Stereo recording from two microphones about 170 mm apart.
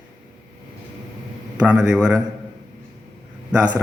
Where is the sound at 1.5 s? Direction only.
5° right (ahead or behind).